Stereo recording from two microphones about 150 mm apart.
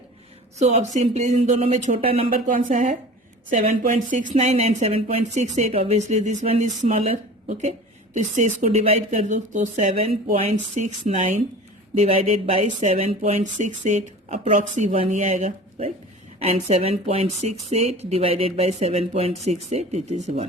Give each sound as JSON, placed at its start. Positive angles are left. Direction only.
{"t": 0.6, "sound": "speech", "side_deg": -50}
{"t": 2.3, "sound": "a woman's voice", "side_deg": -65}